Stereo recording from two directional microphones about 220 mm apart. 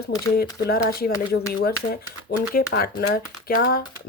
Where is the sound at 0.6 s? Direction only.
45° left (ahead or behind).